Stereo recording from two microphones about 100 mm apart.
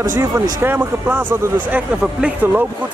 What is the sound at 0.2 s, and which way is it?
Speech, 25° right (ahead or behind).